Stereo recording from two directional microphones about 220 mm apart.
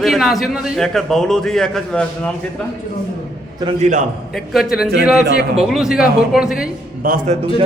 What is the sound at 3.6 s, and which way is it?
Speech, 30° right (ahead or behind).